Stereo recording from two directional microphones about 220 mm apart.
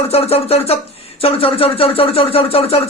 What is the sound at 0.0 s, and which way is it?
Speech, 25° left (ahead or behind).